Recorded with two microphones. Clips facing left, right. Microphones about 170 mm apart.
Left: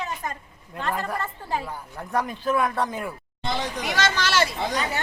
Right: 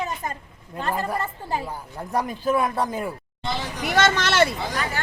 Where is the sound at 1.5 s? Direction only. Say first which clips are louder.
Even; 15° right (ahead or behind).